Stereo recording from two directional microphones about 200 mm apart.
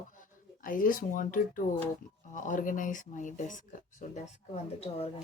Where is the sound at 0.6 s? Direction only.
45° left (ahead or behind).